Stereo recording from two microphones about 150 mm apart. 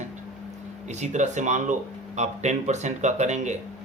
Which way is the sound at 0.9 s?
50° right (ahead or behind).